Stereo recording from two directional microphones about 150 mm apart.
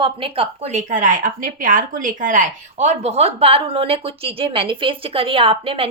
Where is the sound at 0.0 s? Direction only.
35° right (ahead or behind).